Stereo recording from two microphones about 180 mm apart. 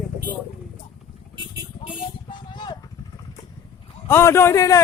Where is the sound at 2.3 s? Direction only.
25° left (ahead or behind).